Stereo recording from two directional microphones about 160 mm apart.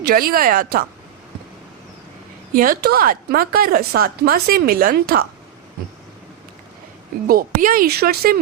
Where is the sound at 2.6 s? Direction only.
65° right (ahead or behind).